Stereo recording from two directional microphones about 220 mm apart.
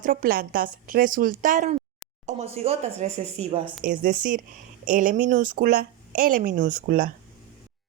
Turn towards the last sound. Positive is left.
turn(degrees=-40)  # may be behind; listen again after turning